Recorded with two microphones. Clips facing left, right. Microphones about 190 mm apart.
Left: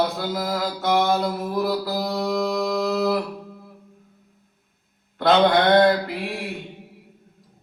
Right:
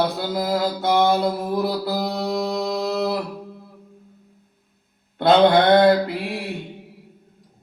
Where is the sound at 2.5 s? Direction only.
30° right (ahead or behind).